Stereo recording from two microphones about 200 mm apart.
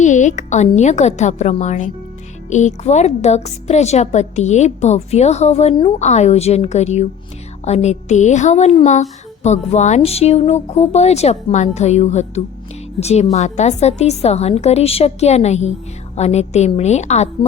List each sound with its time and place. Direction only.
0.0 s speech: 40° left (ahead or behind)